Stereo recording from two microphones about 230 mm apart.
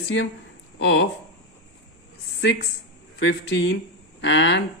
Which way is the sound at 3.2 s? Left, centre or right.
Left.